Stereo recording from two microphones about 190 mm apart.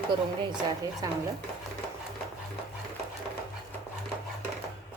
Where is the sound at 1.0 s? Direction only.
20° right (ahead or behind).